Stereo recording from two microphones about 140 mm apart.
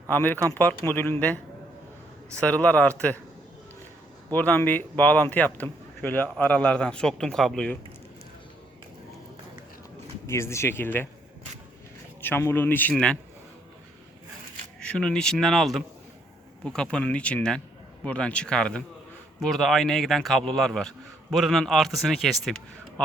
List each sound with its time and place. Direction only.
0.1 s speech: 15° left (ahead or behind)
2.3 s speech: 10° left (ahead or behind)
4.3 s a man's voice: 10° left (ahead or behind)
10.2 s speech: 20° left (ahead or behind)
12.2 s speech: 15° left (ahead or behind)
14.8 s a man's voice: 5° left (ahead or behind)